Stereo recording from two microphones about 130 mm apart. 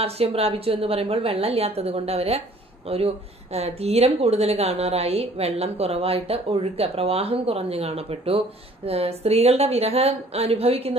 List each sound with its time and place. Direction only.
0.0 s a woman's voice: 50° right (ahead or behind)